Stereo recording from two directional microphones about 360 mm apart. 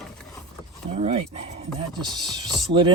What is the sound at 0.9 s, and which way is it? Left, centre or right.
Speech, centre.